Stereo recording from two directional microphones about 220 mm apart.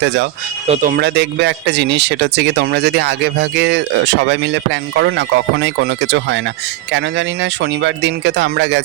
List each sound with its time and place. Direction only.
0.0 s speech: 50° right (ahead or behind)
0.7 s speech: 35° right (ahead or behind); by 8.8 s 55° right (ahead or behind)